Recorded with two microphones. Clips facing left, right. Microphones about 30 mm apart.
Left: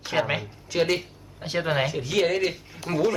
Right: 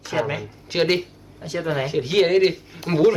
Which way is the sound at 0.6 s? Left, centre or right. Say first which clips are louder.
Right 3 dB; right.